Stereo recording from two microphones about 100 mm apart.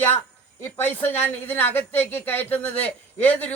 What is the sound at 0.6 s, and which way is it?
Speech, 20° left (ahead or behind).